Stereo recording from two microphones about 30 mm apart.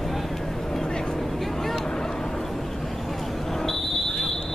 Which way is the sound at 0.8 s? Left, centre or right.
Left.